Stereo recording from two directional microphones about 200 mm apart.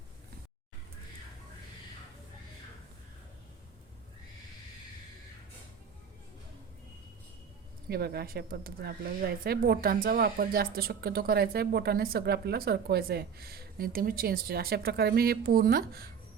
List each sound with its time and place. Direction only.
7.9 s speech: 50° right (ahead or behind)